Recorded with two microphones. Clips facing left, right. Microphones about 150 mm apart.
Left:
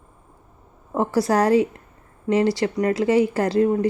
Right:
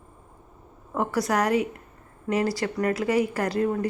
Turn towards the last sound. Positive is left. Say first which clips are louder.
# left 6 dB
turn(degrees=25)  # may be behind; listen again after turning